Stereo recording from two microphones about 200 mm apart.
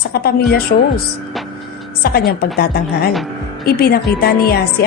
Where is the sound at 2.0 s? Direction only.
50° left (ahead or behind).